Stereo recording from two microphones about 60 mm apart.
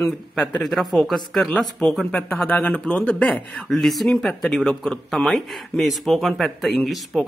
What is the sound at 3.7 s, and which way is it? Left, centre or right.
Speech, centre.